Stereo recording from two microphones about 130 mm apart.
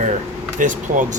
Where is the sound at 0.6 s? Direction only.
75° right (ahead or behind).